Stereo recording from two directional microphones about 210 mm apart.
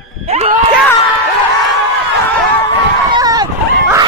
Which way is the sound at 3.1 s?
15° right (ahead or behind).